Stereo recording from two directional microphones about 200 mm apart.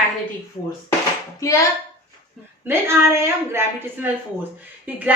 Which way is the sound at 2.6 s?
15° right (ahead or behind).